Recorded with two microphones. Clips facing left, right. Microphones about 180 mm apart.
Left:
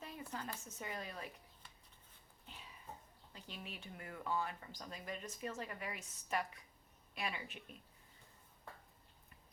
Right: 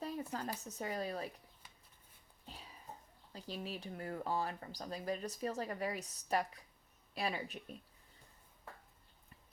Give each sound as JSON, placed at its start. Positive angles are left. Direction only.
{"t": 0.3, "sound": "speech", "side_deg": -40}
{"t": 2.5, "sound": "a sound", "side_deg": -35}
{"t": 3.3, "sound": "speech", "side_deg": -35}